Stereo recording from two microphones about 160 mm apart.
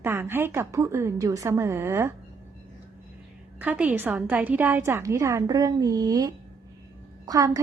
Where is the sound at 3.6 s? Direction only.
10° right (ahead or behind).